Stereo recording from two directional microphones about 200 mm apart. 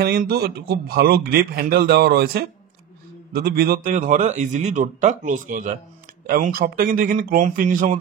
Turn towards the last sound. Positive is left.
turn(degrees=-40)  # may be behind; listen again after turning